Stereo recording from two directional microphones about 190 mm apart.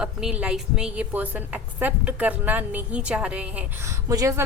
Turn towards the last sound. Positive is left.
turn(degrees=-15)  # may be behind; listen again after turning